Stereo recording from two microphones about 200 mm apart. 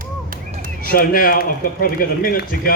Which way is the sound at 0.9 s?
45° left (ahead or behind).